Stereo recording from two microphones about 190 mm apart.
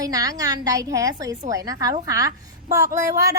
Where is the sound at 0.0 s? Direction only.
20° right (ahead or behind).